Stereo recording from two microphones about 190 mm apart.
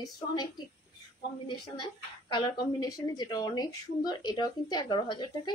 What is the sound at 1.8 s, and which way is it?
A woman's voice, 25° left (ahead or behind).